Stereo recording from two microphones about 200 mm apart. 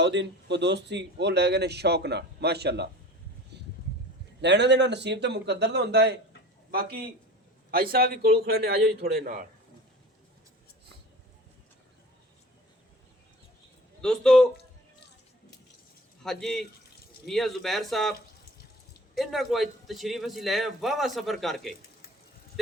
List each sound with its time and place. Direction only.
0.0 s speech: 60° right (ahead or behind)
3.5 s vehicle: 60° right (ahead or behind)
4.4 s a man's voice: 60° right (ahead or behind)
14.0 s a man's voice: 5° left (ahead or behind)
16.2 s a man's voice: centre (ahead or behind)
19.1 s a man's voice: centre (ahead or behind)